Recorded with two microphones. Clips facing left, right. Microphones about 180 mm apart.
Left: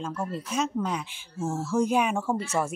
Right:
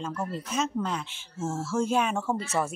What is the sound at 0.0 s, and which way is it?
Speech, 5° left (ahead or behind).